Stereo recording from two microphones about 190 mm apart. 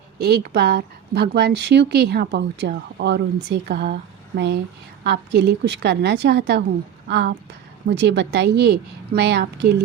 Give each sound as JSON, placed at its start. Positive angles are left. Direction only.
{"t": 0.2, "sound": "speech", "side_deg": -60}